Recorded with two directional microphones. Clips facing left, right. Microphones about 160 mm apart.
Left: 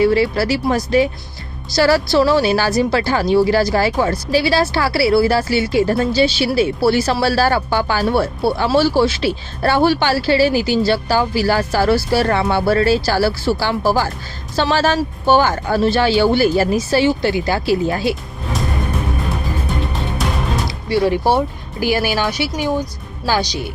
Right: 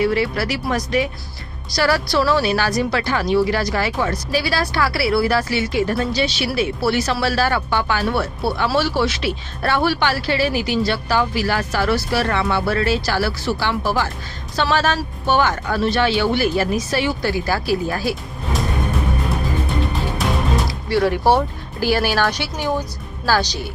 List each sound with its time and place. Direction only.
0.0 s a woman's voice: 30° left (ahead or behind)
19.9 s music: centre (ahead or behind)
20.9 s speech: 10° left (ahead or behind)